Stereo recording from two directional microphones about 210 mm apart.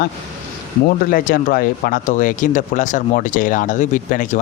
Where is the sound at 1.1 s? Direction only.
40° left (ahead or behind).